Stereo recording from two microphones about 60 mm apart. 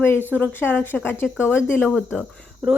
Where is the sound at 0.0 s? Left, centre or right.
Left.